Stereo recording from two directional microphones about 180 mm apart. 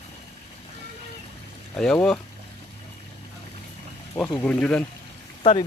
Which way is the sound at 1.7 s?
5° left (ahead or behind).